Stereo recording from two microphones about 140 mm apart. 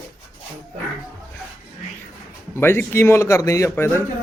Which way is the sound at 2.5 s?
15° left (ahead or behind).